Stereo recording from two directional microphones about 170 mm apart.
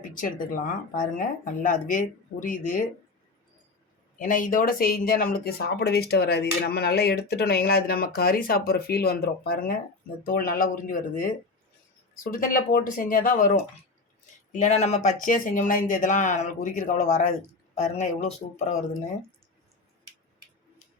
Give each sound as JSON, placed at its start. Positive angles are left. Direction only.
{"t": 0.0, "sound": "speech", "side_deg": 55}
{"t": 4.2, "sound": "speech", "side_deg": 50}
{"t": 14.6, "sound": "speech", "side_deg": 40}